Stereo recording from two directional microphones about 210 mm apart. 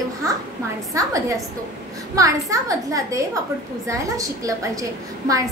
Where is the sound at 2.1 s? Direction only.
15° right (ahead or behind).